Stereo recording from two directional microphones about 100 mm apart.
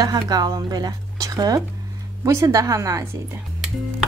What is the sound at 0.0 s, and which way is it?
Speech, 40° right (ahead or behind).